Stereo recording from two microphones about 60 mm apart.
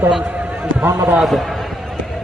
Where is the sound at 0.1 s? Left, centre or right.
Centre.